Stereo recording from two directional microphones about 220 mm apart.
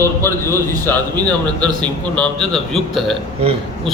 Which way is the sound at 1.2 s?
20° right (ahead or behind).